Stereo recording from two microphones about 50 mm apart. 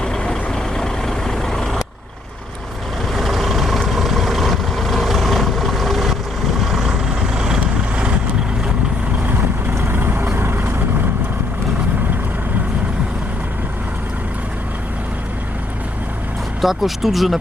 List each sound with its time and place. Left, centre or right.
0.0 s vehicle: centre
3.2 s vehicle: centre
9.7 s vehicle: right
16.6 s speech: centre